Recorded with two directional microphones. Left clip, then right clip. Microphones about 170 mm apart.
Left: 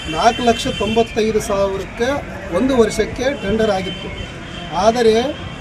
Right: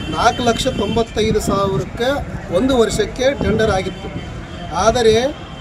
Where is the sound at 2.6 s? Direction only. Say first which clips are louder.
Even; 25° right (ahead or behind).